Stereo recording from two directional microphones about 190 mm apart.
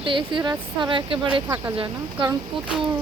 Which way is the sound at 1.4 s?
15° right (ahead or behind).